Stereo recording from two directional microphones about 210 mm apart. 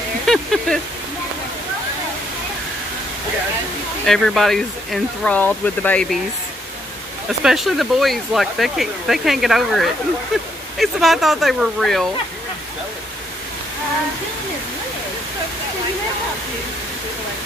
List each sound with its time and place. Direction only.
0.3 s a sound: centre (ahead or behind)
4.0 s speech: centre (ahead or behind)
7.2 s speech: centre (ahead or behind)